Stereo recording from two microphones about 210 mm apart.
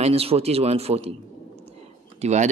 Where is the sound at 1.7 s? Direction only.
30° right (ahead or behind).